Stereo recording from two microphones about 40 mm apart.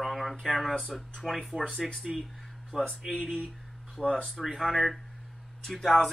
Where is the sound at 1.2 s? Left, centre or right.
Centre.